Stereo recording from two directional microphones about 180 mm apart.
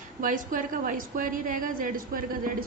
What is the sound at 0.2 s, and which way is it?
A woman's voice, 50° right (ahead or behind).